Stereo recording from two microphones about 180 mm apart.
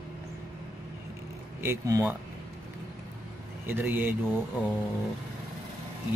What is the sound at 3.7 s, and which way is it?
Speech, 10° right (ahead or behind).